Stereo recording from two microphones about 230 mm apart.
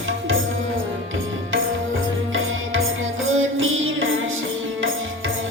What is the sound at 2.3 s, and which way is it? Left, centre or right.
Music, right.